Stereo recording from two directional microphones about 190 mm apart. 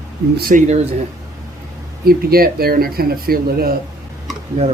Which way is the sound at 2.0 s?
50° right (ahead or behind).